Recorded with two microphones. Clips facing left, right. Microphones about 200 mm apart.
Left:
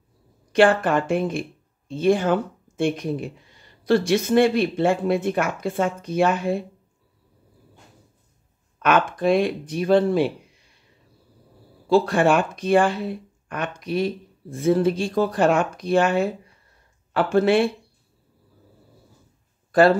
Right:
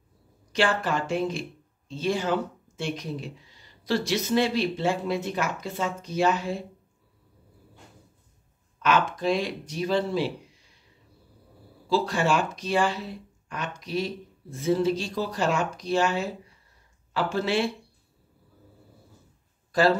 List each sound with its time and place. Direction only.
0.5 s speech: 55° left (ahead or behind)
8.7 s speech: 55° left (ahead or behind)
11.9 s speech: 55° left (ahead or behind)
19.7 s speech: 55° left (ahead or behind)